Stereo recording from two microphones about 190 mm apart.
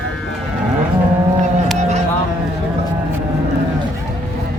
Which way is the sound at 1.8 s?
35° right (ahead or behind).